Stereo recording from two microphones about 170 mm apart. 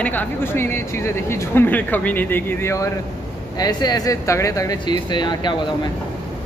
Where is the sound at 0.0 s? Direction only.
10° left (ahead or behind); by 5.6 s 25° left (ahead or behind).